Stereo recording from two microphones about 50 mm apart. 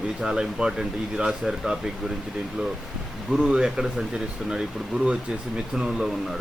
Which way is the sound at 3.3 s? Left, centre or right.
Centre.